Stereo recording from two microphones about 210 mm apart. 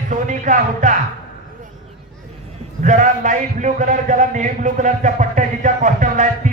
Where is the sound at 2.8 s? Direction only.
40° right (ahead or behind).